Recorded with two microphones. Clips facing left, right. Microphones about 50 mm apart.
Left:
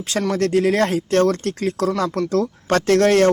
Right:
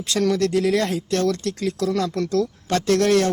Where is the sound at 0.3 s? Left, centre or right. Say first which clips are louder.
Left 7 dB; left.